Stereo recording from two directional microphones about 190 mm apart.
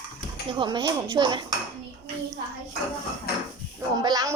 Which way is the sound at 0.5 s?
25° right (ahead or behind).